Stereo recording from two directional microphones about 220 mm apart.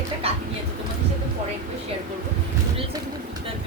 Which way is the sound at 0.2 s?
25° right (ahead or behind).